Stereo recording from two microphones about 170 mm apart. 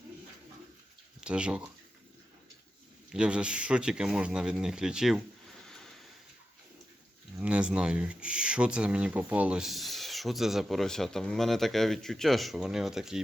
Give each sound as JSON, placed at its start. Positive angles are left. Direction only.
{"t": 1.2, "sound": "speech", "side_deg": -5}
{"t": 3.1, "sound": "speech", "side_deg": -5}
{"t": 7.3, "sound": "speech", "side_deg": -5}